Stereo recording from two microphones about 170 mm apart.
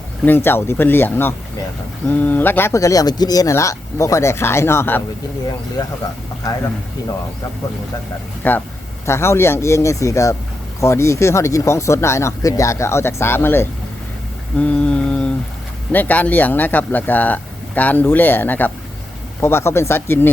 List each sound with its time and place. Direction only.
0.3 s speech: 15° left (ahead or behind)
5.8 s speech: 25° left (ahead or behind)
8.4 s speech: 10° left (ahead or behind)
14.6 s mantra: 5° left (ahead or behind)
15.9 s speech: 10° left (ahead or behind)